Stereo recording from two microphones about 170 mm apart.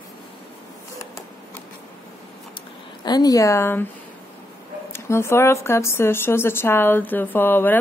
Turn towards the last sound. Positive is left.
turn(degrees=10)  # may be behind; listen again after turning